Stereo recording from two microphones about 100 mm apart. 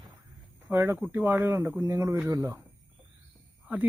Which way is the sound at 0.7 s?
25° right (ahead or behind).